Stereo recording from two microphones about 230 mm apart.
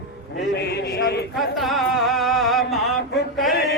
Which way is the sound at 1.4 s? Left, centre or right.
Centre.